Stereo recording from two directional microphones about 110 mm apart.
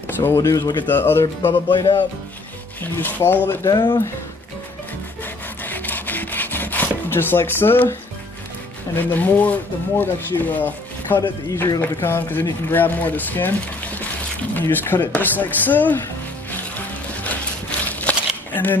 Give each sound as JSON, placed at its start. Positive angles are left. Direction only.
{"t": 0.0, "sound": "speech", "side_deg": 20}
{"t": 0.8, "sound": "speech", "side_deg": 20}
{"t": 1.5, "sound": "speech", "side_deg": 45}
{"t": 2.8, "sound": "speech", "side_deg": 15}
{"t": 3.7, "sound": "speech", "side_deg": 45}
{"t": 5.6, "sound": "wood", "side_deg": 15}
{"t": 8.9, "sound": "speech", "side_deg": 15}
{"t": 17.2, "sound": "a sound", "side_deg": 15}